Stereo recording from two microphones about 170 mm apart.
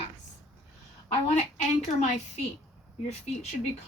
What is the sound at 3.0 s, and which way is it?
Speech, 40° left (ahead or behind).